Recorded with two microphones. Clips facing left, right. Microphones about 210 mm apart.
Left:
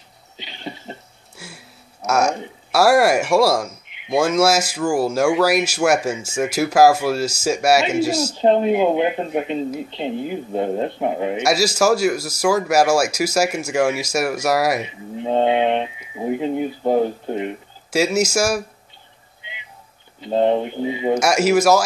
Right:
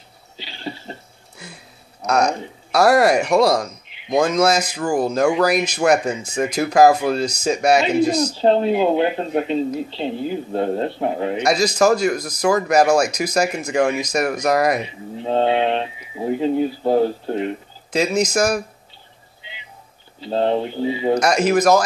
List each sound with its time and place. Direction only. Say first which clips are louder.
0.4 s a sound: right 2 dB; 20° left (ahead or behind)
1.4 s speech: even; 5° left (ahead or behind)
8.4 s speech: left 2 dB; 15° left (ahead or behind)
20.2 s speech: left 2 dB; 15° left (ahead or behind)
21.2 s speech: left 2 dB; 10° left (ahead or behind)